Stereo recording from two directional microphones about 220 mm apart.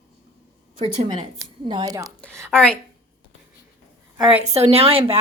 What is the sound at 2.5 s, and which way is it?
Speech, centre (ahead or behind).